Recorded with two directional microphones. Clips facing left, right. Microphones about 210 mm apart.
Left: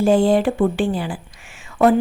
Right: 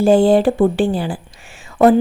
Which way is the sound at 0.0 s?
30° right (ahead or behind).